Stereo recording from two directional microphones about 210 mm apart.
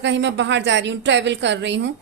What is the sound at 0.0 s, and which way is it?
A woman's voice, 55° right (ahead or behind).